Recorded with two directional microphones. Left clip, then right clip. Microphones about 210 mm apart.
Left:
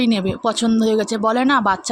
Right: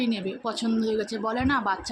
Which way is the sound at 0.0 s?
50° left (ahead or behind).